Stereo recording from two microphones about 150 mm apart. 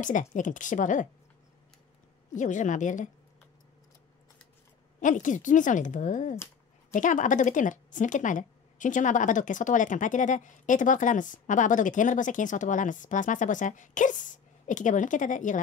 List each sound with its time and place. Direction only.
0.0 s a woman's voice: 55° left (ahead or behind)
2.3 s a woman's voice: 55° left (ahead or behind)
5.0 s a woman's voice: 55° left (ahead or behind)